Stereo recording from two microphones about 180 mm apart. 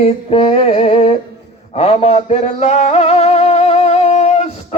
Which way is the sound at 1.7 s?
35° left (ahead or behind).